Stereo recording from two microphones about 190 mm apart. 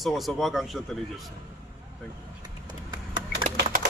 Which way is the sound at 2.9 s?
25° right (ahead or behind).